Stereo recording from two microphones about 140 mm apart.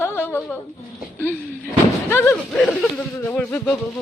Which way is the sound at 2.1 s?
15° left (ahead or behind).